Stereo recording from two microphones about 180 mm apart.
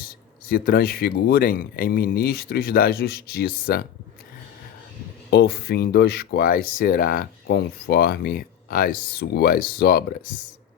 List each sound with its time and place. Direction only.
0.4 s speech: 55° left (ahead or behind)
5.3 s speech: 60° left (ahead or behind)